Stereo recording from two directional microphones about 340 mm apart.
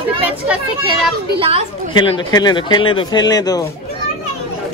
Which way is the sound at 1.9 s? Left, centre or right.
Centre.